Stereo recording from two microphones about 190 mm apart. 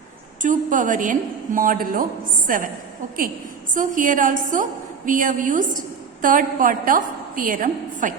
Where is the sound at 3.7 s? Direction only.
45° right (ahead or behind).